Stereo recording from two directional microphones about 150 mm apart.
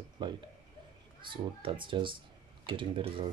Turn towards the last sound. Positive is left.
turn(degrees=-35)  # may be behind; listen again after turning